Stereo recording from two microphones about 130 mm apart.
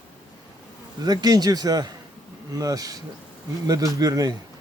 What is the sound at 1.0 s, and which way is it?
Speech, 30° right (ahead or behind).